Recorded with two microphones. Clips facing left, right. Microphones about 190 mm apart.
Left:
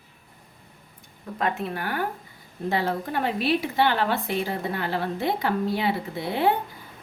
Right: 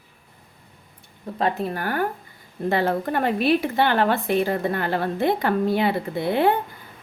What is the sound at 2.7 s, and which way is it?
A woman's voice, 55° right (ahead or behind).